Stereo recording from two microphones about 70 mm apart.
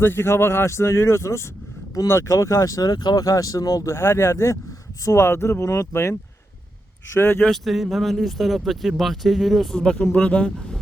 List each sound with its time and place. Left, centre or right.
0.0 s speech: left
3.2 s speech: left
7.2 s speech: left
7.5 s speech: centre
9.7 s speech: centre